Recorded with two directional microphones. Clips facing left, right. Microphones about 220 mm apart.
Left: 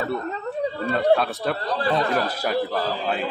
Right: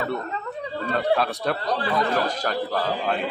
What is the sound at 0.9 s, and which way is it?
A man's voice, centre (ahead or behind).